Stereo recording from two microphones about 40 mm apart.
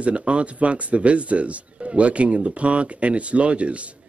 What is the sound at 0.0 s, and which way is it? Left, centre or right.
Speech, right.